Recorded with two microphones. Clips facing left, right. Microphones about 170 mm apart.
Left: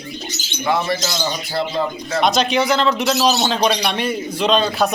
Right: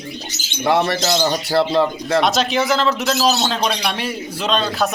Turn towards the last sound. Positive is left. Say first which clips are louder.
# left 3 dB
turn(degrees=0)  # may be behind; listen again after turning